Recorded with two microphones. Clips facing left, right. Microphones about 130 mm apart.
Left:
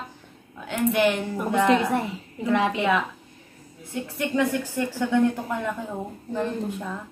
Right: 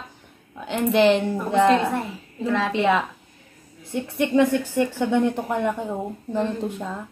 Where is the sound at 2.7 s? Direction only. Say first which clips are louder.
Right 3 dB; 25° right (ahead or behind).